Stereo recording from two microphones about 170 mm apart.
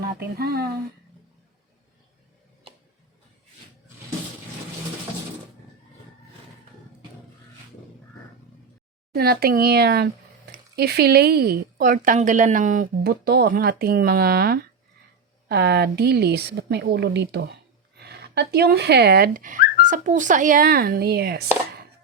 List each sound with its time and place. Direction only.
0.2 s speech: 70° right (ahead or behind)
9.1 s a woman's voice: 65° right (ahead or behind); by 17.4 s 85° right
17.9 s speech: 70° right (ahead or behind)
19.8 s a woman's voice: 50° right (ahead or behind); by 21.4 s 70° right (ahead or behind)